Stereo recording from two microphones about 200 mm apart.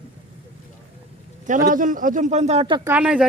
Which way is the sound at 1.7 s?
40° right (ahead or behind).